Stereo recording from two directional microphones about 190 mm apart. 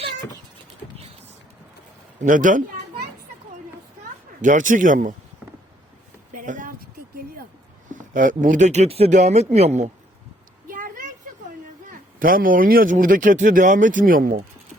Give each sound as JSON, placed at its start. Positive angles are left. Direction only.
{"t": 2.2, "sound": "speech", "side_deg": -45}
{"t": 4.4, "sound": "speech", "side_deg": -40}
{"t": 6.3, "sound": "a sound", "side_deg": -45}
{"t": 7.9, "sound": "speech", "side_deg": -45}
{"t": 10.7, "sound": "a sound", "side_deg": -45}
{"t": 11.9, "sound": "speech", "side_deg": -45}